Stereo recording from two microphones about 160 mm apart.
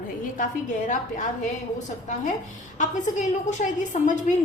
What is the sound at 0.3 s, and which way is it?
Speech, 55° left (ahead or behind).